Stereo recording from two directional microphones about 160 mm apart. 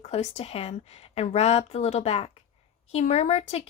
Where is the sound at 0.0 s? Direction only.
45° left (ahead or behind).